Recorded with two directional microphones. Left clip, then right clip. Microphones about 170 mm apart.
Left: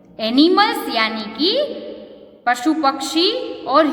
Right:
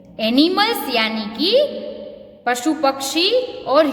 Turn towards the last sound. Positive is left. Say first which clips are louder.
# even
turn(degrees=-30)  # may be behind; listen again after turning